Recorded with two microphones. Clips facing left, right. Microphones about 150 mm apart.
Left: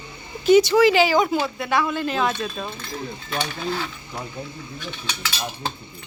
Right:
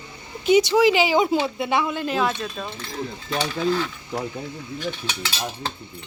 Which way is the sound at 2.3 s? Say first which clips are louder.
Left 1 dB; 5° left (ahead or behind).